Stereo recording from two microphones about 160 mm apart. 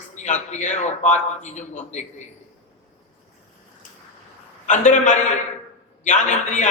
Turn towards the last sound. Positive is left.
turn(degrees=50)  # may be behind; listen again after turning